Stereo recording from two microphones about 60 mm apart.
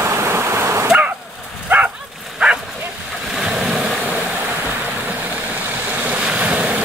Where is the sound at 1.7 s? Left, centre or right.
Right.